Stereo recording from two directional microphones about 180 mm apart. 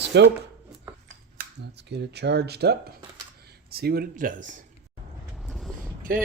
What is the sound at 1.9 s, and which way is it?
Speech, 70° right (ahead or behind).